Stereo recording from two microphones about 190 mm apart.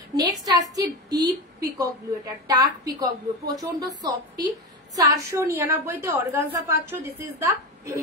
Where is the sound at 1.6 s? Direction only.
20° right (ahead or behind).